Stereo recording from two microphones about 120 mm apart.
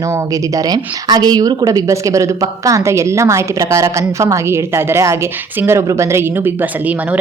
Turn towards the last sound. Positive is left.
turn(degrees=-10)  # may be behind; listen again after turning